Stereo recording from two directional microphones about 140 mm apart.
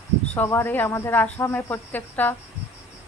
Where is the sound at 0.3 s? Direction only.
15° left (ahead or behind).